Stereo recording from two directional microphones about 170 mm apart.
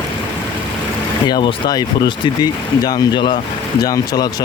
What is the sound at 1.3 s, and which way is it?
Speech, 25° left (ahead or behind).